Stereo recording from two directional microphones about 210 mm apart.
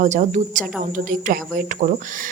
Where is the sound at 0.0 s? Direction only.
35° right (ahead or behind).